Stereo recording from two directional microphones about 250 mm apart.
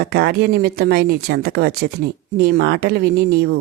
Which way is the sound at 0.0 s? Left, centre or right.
Right.